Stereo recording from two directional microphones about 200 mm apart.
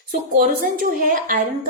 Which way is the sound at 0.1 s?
45° right (ahead or behind).